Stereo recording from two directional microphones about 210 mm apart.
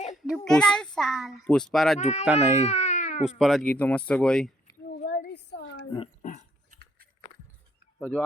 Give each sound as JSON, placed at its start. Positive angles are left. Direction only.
{"t": 0.3, "sound": "a child's voice", "side_deg": 0}
{"t": 2.0, "sound": "speech", "side_deg": 30}
{"t": 2.2, "sound": "speech", "side_deg": -10}
{"t": 2.6, "sound": "baby cry", "side_deg": 35}
{"t": 3.2, "sound": "a child's voice", "side_deg": 0}
{"t": 4.9, "sound": "a sound", "side_deg": 50}
{"t": 6.2, "sound": "dog", "side_deg": 40}
{"t": 6.7, "sound": "dog", "side_deg": -45}
{"t": 7.9, "sound": "speech", "side_deg": 5}